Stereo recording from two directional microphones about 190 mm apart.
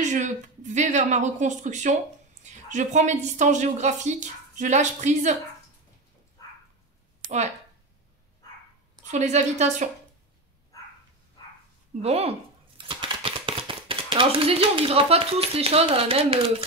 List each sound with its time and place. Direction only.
0.0 s a woman's voice: 40° right (ahead or behind)
9.0 s a woman's voice: 40° right (ahead or behind)
12.0 s speech: 30° right (ahead or behind)